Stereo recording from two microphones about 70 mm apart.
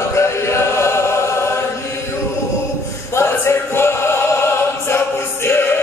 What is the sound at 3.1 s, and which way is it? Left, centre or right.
Music, left.